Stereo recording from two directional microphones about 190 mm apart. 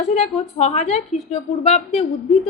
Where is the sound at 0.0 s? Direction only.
35° left (ahead or behind).